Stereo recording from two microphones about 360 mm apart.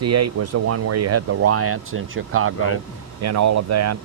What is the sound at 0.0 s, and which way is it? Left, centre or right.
Speech, right.